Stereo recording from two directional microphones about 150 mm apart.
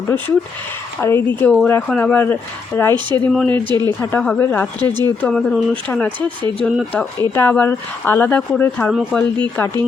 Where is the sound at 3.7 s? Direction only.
30° right (ahead or behind).